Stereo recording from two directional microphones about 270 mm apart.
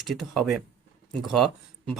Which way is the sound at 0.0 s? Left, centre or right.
Centre.